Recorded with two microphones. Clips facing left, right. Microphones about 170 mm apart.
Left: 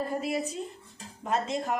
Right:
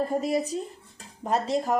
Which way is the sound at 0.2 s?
40° right (ahead or behind).